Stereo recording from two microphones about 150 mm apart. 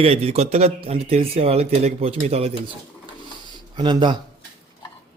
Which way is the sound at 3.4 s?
30° right (ahead or behind).